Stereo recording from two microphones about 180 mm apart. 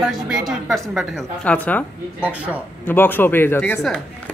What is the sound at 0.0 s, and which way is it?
A woman's voice, centre (ahead or behind).